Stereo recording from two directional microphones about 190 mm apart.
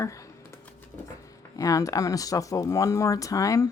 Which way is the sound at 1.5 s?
15° left (ahead or behind).